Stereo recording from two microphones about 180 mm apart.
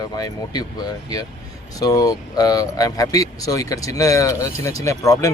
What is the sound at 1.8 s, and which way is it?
Speech, 20° left (ahead or behind).